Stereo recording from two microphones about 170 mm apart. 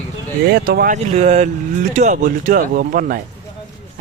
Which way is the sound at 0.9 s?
40° right (ahead or behind).